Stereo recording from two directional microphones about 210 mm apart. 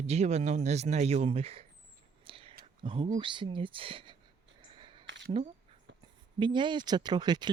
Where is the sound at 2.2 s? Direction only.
25° right (ahead or behind).